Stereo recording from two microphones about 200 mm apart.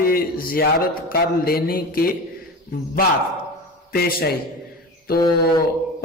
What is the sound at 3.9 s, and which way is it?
Speech, 50° left (ahead or behind).